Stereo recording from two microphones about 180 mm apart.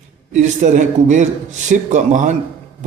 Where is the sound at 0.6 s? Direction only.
45° right (ahead or behind).